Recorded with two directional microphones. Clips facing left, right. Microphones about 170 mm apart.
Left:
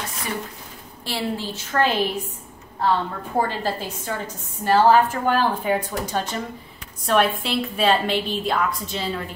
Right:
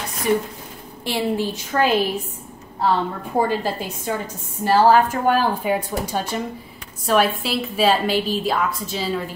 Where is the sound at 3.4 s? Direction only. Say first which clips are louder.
Right 3 dB; 15° right (ahead or behind).